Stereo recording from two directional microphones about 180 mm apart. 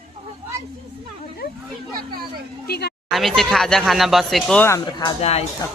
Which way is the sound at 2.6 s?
60° left (ahead or behind).